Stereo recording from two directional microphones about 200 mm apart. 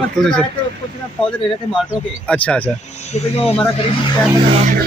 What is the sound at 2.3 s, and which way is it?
Speech, 5° left (ahead or behind).